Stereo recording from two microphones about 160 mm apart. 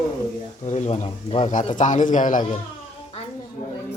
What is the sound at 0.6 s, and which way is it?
A man's voice, 45° left (ahead or behind).